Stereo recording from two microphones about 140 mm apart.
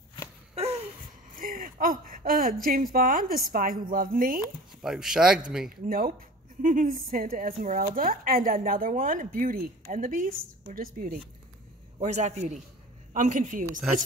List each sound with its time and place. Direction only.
1.4 s speech: 85° right
4.8 s a man's voice: 5° right (ahead or behind)
5.9 s speech: 90° right
6.6 s speech: 70° right (ahead or behind)
12.0 s a man's voice: 55° right (ahead or behind)
13.1 s speech: 65° right (ahead or behind)